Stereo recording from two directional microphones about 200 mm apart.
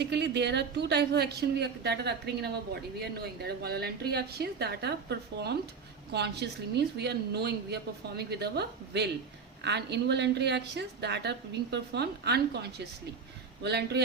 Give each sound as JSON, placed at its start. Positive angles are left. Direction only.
{"t": 0.0, "sound": "a woman's voice", "side_deg": -60}
{"t": 13.6, "sound": "a woman's voice", "side_deg": -55}